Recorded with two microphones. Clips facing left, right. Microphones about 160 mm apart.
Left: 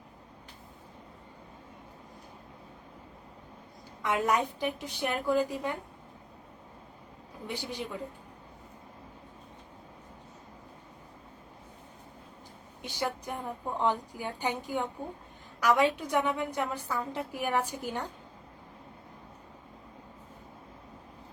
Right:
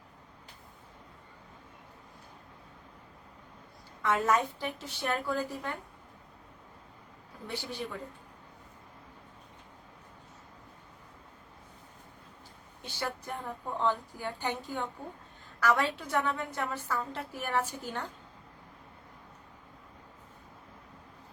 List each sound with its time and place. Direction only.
4.0 s a woman's voice: 15° left (ahead or behind)
7.4 s a woman's voice: 15° left (ahead or behind)
12.8 s a woman's voice: 15° left (ahead or behind)